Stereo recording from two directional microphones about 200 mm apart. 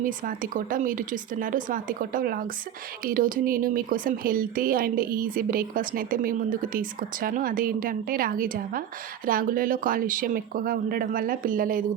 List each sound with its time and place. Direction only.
0.0 s speech: 45° right (ahead or behind)